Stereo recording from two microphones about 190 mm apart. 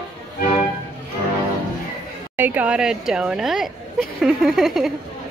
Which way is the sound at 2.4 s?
10° right (ahead or behind).